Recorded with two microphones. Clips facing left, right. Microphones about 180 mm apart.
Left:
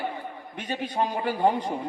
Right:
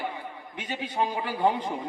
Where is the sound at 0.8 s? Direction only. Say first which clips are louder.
Left 2 dB; 10° left (ahead or behind).